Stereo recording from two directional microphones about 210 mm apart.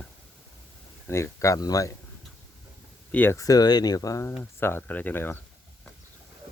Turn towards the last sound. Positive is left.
turn(degrees=10)  # may be behind; listen again after turning